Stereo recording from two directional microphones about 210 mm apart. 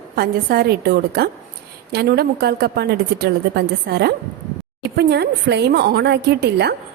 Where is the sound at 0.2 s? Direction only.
45° right (ahead or behind).